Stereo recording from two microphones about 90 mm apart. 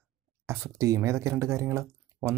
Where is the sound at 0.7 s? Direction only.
35° right (ahead or behind).